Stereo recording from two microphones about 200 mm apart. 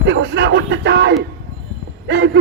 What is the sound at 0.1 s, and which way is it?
Speech, 60° right (ahead or behind).